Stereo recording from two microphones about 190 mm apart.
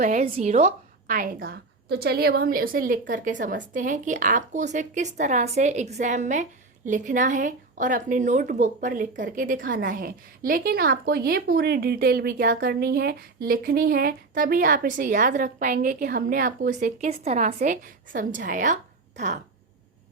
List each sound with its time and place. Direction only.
0.0 s a woman's voice: 40° right (ahead or behind)